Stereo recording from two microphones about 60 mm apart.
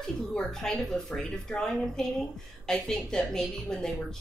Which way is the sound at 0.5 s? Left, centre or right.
Centre.